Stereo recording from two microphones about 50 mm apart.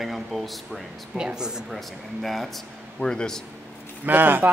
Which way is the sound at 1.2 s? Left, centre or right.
Centre.